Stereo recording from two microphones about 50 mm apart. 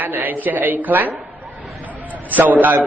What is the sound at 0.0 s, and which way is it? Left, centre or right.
A woman's voice, right.